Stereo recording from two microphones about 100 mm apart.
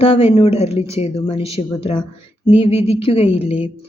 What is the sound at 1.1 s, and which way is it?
A woman's voice, 55° left (ahead or behind).